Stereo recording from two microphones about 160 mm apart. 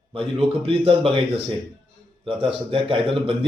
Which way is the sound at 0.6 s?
35° right (ahead or behind).